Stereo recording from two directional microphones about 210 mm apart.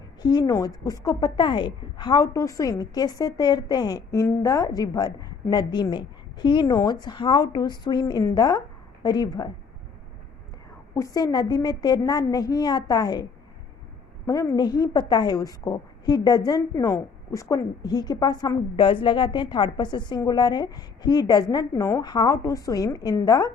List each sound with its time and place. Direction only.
0.2 s a woman's voice: 20° left (ahead or behind)
10.9 s a woman's voice: 15° left (ahead or behind)
14.3 s a woman's voice: 15° left (ahead or behind)